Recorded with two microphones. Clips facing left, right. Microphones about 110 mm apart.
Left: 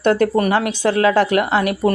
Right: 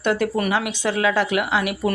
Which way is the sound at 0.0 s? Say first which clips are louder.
Left 6 dB; 40° left (ahead or behind).